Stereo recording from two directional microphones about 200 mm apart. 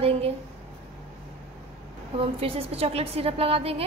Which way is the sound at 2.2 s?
30° right (ahead or behind).